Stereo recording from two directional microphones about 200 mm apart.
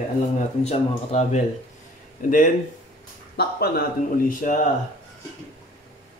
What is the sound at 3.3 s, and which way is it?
Speech, 50° left (ahead or behind).